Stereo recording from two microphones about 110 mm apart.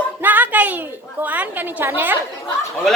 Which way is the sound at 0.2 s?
15° right (ahead or behind).